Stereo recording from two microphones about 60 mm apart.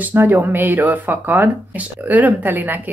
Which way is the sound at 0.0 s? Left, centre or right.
Right.